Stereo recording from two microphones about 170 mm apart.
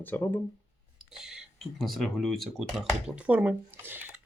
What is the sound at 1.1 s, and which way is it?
Speech, 5° right (ahead or behind).